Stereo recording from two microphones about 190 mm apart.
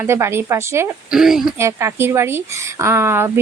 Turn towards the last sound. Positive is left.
turn(degrees=-15)  # may be behind; listen again after turning